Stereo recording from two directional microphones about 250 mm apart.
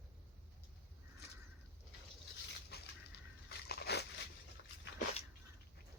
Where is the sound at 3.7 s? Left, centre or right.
Left.